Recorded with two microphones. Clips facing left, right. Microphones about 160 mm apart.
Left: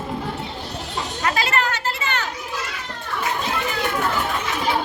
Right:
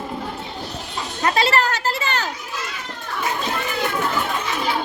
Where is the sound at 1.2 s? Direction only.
30° right (ahead or behind).